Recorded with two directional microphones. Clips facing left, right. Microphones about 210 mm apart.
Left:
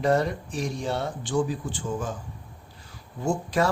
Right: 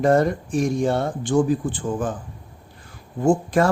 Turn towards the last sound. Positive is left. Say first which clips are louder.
# right 7 dB
turn(degrees=-50)  # may be behind; listen again after turning